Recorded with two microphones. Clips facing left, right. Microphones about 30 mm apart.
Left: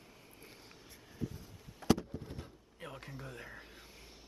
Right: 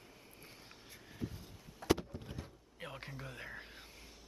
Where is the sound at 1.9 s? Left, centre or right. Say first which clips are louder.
Left 2 dB; right.